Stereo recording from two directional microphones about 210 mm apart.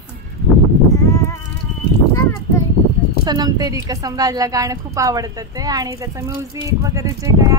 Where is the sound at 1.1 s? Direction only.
15° left (ahead or behind).